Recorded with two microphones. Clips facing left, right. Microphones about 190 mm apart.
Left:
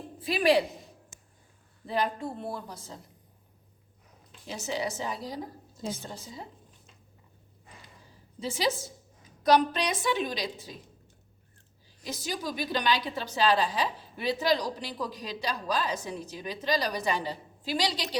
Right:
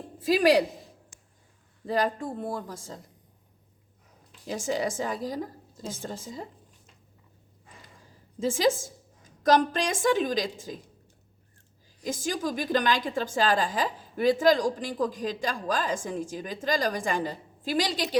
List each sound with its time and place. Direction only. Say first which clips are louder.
0.2 s a woman's voice: right 3 dB; 40° right (ahead or behind)
1.9 s a woman's voice: right 3 dB; 45° right (ahead or behind)
4.4 s a woman's voice: right 4 dB; 45° right (ahead or behind)
8.4 s a woman's voice: right 5 dB; 45° right (ahead or behind)
12.0 s a woman's voice: right 5 dB; 50° right (ahead or behind)